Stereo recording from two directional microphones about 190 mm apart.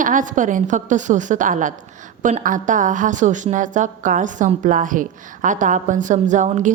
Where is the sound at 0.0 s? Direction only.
45° right (ahead or behind).